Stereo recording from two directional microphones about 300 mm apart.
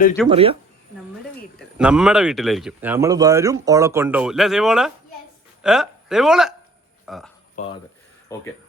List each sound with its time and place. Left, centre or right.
0.3 s speech: centre
1.5 s speech: centre
7.0 s a sound: centre
7.6 s speech: left
8.3 s speech: centre